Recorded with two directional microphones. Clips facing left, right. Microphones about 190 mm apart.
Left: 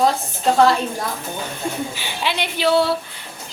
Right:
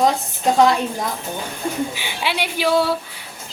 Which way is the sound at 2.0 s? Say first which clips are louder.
Even; 10° right (ahead or behind).